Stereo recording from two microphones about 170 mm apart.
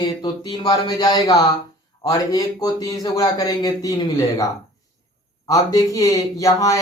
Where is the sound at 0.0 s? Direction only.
25° left (ahead or behind).